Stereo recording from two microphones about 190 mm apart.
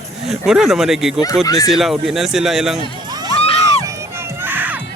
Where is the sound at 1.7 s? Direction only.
Centre (ahead or behind).